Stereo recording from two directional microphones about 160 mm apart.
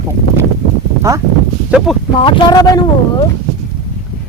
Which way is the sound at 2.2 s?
30° left (ahead or behind).